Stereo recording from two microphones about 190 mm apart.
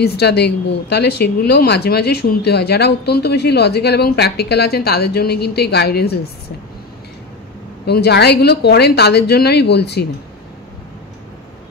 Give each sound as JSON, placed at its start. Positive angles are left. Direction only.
{"t": 0.0, "sound": "speech", "side_deg": 60}
{"t": 7.8, "sound": "speech", "side_deg": 60}